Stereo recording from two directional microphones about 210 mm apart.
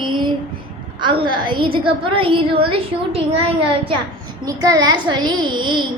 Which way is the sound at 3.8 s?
20° right (ahead or behind).